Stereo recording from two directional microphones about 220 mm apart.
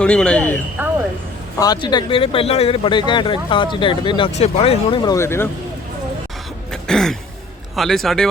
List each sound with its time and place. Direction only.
0.0 s speech: 5° left (ahead or behind)
1.5 s speech: 15° left (ahead or behind)
6.8 s throat clearing: centre (ahead or behind)
7.8 s speech: centre (ahead or behind)